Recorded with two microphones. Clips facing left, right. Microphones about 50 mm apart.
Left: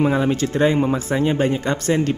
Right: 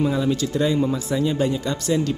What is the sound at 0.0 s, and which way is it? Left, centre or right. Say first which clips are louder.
Speech: left 3 dB; left.